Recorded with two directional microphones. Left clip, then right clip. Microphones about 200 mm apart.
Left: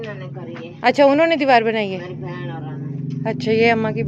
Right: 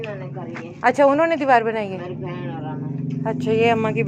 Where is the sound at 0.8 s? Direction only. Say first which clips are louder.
Left 2 dB; 45° left (ahead or behind).